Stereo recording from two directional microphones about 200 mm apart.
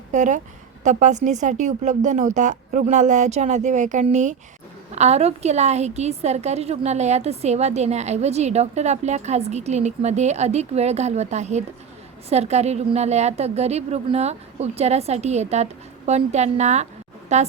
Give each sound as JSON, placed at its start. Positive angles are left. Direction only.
{"t": 0.1, "sound": "a woman's voice", "side_deg": -35}